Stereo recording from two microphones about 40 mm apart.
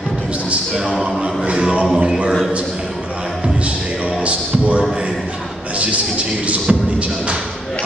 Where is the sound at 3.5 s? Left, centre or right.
Right.